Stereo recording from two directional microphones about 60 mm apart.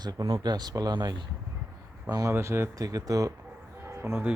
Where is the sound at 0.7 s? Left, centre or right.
Right.